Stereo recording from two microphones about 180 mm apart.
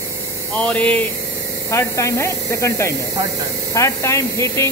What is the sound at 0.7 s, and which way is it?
Speech, 5° left (ahead or behind).